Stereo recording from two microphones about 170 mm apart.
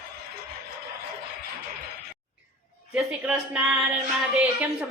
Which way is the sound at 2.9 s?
10° right (ahead or behind).